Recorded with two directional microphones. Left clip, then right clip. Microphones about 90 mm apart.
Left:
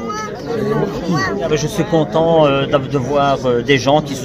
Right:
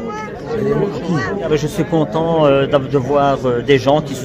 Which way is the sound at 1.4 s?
35° right (ahead or behind).